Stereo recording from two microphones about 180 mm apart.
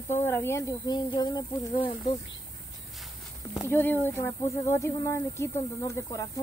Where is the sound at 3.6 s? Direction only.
10° left (ahead or behind).